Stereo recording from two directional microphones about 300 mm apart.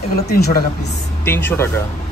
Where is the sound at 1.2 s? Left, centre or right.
Centre.